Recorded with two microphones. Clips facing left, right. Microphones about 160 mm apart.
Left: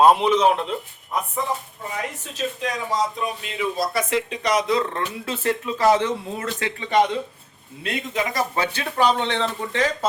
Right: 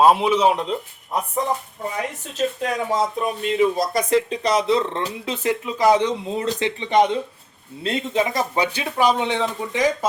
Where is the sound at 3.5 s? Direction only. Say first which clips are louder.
Right 5 dB; 40° right (ahead or behind).